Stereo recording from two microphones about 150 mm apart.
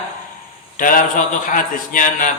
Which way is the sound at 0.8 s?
65° left (ahead or behind).